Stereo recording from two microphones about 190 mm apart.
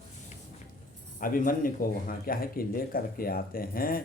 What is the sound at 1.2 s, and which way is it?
Mantra, 45° left (ahead or behind).